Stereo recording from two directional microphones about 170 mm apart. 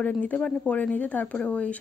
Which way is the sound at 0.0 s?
10° left (ahead or behind).